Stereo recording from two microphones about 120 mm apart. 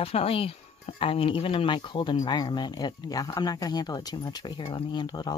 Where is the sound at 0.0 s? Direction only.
50° left (ahead or behind).